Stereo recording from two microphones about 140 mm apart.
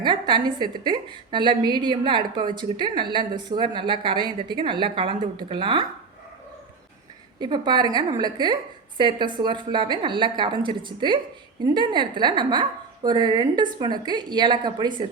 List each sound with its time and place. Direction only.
0.0 s a woman's voice: 35° right (ahead or behind)
7.3 s a woman's voice: 30° right (ahead or behind)